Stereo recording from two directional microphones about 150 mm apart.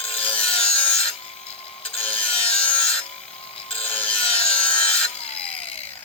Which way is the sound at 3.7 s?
40° left (ahead or behind).